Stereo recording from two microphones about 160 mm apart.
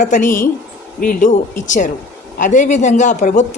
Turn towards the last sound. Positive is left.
turn(degrees=50)  # may be behind; listen again after turning